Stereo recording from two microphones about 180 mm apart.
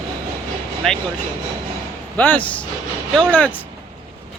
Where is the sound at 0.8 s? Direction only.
Centre (ahead or behind).